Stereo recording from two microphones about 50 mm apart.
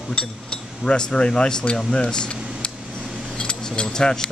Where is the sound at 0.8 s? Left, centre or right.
Centre.